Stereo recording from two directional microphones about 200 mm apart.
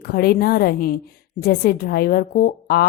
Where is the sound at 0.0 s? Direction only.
50° left (ahead or behind).